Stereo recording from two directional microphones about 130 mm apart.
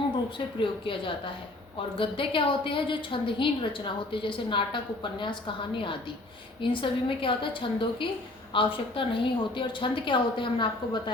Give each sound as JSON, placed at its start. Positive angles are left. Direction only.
{"t": 0.3, "sound": "a woman's voice", "side_deg": 40}